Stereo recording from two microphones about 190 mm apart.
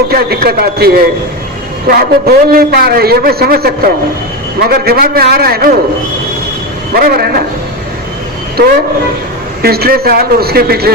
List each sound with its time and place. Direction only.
0.1 s a man's voice: 55° right (ahead or behind)
6.9 s a man's voice: 55° right (ahead or behind)
9.6 s a man's voice: 55° right (ahead or behind)